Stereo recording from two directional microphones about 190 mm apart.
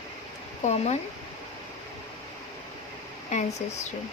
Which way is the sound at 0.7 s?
35° left (ahead or behind).